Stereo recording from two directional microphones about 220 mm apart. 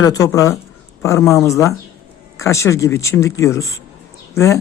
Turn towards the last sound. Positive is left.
turn(degrees=15)  # may be behind; listen again after turning